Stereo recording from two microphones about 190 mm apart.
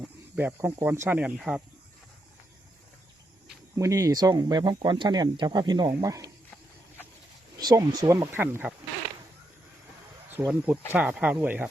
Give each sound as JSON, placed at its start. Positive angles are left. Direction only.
{"t": 0.0, "sound": "speech", "side_deg": -10}
{"t": 3.8, "sound": "speech", "side_deg": -15}
{"t": 7.6, "sound": "speech", "side_deg": -20}
{"t": 10.3, "sound": "speech", "side_deg": -10}